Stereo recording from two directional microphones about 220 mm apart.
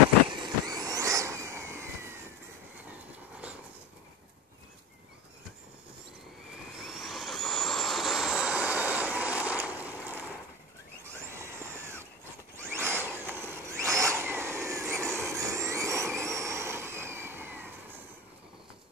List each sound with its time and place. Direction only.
0.3 s vehicle: 20° right (ahead or behind)
6.5 s vehicle: centre (ahead or behind)
11.3 s a sound: 10° right (ahead or behind)
16.3 s vehicle: 15° right (ahead or behind)